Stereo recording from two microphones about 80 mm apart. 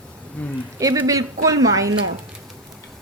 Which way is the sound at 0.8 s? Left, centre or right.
Right.